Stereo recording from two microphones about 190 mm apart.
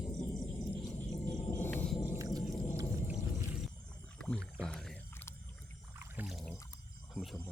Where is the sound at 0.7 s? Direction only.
15° left (ahead or behind).